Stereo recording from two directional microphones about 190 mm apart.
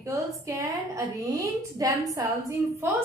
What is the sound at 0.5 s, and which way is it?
A woman's voice, 15° right (ahead or behind).